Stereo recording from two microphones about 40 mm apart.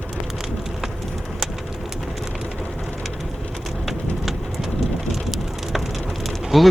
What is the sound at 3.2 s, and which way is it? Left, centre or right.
Rain, centre.